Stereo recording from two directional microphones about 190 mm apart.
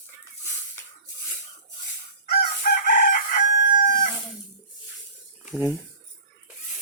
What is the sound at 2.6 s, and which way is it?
Chicken, 45° left (ahead or behind).